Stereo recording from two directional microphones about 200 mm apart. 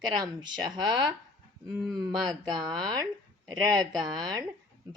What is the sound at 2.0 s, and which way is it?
A woman's voice, 20° right (ahead or behind).